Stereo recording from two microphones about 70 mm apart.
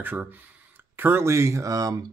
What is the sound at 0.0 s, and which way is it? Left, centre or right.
Speech, right.